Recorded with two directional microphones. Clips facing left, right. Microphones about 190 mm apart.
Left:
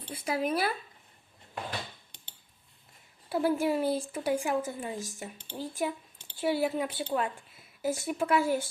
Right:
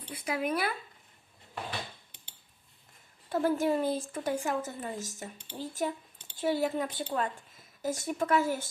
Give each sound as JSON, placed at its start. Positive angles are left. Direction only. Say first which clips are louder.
{"t": 0.1, "sound": "speech", "louder": "left 2 dB", "side_deg": 30}
{"t": 3.2, "sound": "a woman's voice", "louder": "even", "side_deg": 10}